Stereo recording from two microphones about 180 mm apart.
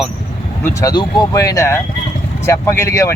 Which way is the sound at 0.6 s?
20° left (ahead or behind).